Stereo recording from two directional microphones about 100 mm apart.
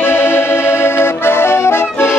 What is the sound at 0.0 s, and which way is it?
Music, 25° left (ahead or behind).